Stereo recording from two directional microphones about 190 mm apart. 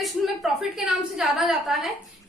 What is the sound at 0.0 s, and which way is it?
A woman's voice, centre (ahead or behind).